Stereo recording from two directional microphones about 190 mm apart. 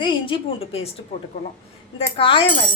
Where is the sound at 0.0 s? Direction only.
25° left (ahead or behind).